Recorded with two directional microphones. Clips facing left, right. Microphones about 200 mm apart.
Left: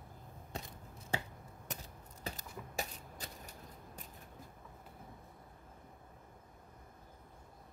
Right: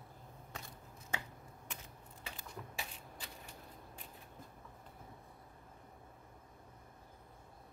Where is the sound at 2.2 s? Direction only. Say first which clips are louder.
Left 4 dB; 40° left (ahead or behind).